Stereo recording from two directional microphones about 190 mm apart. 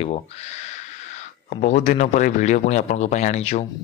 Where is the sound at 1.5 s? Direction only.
40° left (ahead or behind).